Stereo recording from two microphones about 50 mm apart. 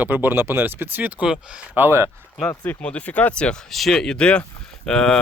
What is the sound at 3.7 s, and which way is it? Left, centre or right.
Speech, centre.